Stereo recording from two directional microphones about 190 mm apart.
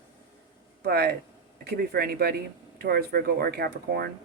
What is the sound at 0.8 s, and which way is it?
Speech, 55° right (ahead or behind).